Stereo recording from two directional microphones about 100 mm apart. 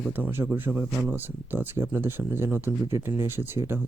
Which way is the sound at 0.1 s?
20° right (ahead or behind).